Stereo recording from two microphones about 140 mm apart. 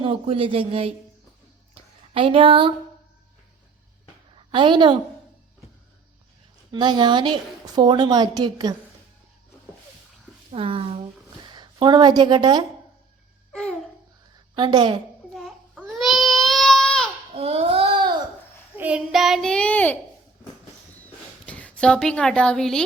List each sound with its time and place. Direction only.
0.0 s a woman's voice: 40° right (ahead or behind)
1.7 s a sound: 40° right (ahead or behind)
4.4 s a woman's voice: 35° right (ahead or behind)
6.7 s a woman's voice: 30° right (ahead or behind)
10.5 s a woman's voice: 40° right (ahead or behind)
13.5 s babbling: 5° left (ahead or behind)
14.5 s a woman's voice: 35° right (ahead or behind)
15.3 s baby cry: centre (ahead or behind)
17.3 s babbling: 45° right (ahead or behind)
18.8 s child singing: 10° right (ahead or behind); by 20.0 s 10° left (ahead or behind)
20.9 s a sound: 10° left (ahead or behind)